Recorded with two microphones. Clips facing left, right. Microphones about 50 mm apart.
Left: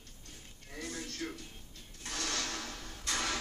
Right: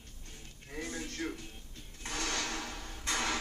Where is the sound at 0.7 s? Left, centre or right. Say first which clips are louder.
Right 2 dB; right.